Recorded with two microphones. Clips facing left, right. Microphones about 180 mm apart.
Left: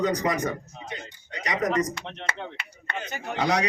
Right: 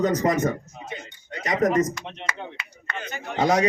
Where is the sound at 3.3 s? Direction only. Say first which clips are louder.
Right 5 dB; 45° right (ahead or behind).